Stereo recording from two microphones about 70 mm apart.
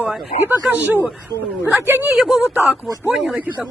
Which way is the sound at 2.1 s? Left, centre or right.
Centre.